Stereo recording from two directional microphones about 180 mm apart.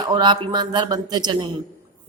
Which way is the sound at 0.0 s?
25° right (ahead or behind).